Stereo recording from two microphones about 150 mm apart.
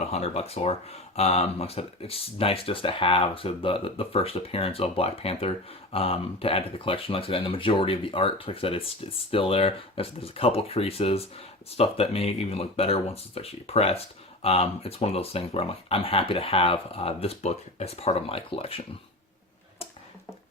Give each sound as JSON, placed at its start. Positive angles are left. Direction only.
{"t": 0.0, "sound": "speech", "side_deg": 45}